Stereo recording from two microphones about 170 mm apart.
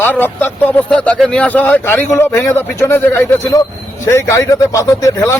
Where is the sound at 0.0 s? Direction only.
10° left (ahead or behind).